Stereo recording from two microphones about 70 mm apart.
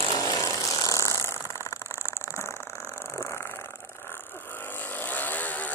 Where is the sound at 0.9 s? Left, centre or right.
Left.